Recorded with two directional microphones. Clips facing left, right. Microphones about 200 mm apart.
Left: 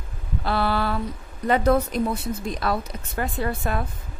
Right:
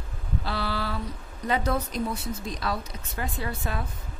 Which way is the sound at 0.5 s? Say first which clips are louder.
Left 8 dB; 55° left (ahead or behind).